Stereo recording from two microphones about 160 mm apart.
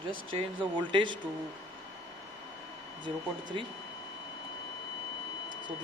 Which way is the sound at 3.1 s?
35° right (ahead or behind).